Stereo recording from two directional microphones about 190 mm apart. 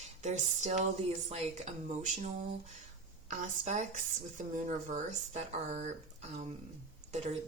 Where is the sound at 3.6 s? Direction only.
40° right (ahead or behind).